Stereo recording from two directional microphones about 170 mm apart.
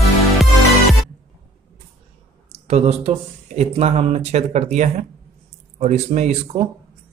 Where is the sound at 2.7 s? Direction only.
40° right (ahead or behind).